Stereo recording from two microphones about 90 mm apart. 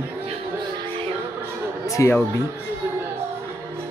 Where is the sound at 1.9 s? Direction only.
35° left (ahead or behind).